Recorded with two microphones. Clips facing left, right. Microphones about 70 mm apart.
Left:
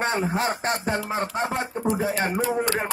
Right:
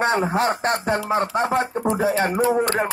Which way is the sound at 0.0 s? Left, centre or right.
Right.